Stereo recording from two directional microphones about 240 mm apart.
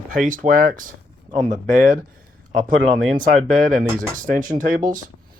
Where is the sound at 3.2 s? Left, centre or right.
Right.